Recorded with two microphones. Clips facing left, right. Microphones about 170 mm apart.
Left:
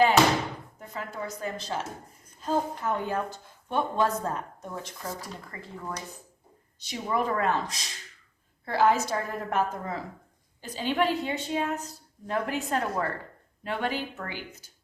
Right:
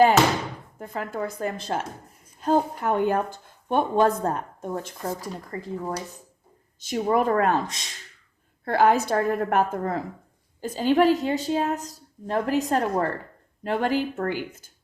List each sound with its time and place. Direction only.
0.8 s a woman's voice: 55° right (ahead or behind)
5.5 s a woman's voice: 35° right (ahead or behind)
6.7 s a woman's voice: 45° right (ahead or behind)
10.6 s a woman's voice: 45° right (ahead or behind)